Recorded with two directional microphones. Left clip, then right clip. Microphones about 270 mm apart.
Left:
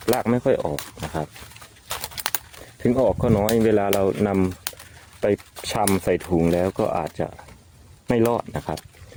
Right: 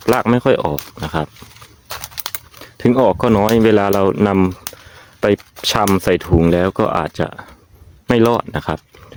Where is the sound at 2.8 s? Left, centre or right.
Right.